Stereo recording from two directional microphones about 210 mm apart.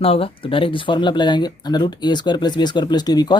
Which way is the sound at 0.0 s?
25° left (ahead or behind).